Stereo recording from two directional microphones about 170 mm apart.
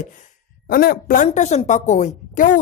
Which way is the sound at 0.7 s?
60° left (ahead or behind).